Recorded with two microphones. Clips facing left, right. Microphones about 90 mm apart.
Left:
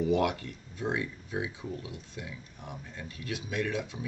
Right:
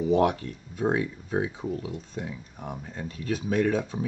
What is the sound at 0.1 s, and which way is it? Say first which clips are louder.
Speech: right 5 dB; 35° right (ahead or behind).